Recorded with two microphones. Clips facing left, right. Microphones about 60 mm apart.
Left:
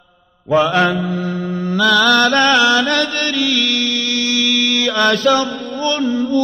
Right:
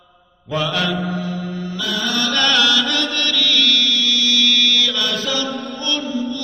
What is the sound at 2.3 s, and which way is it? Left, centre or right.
Mantra, left.